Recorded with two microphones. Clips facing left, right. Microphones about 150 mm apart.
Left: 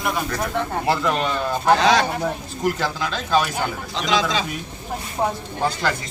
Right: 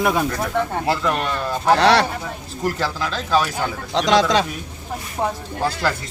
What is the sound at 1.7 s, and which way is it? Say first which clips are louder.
Speech: right 3 dB; 70° right (ahead or behind).